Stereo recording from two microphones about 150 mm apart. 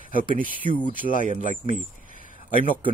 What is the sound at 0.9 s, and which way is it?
Speech, 65° left (ahead or behind).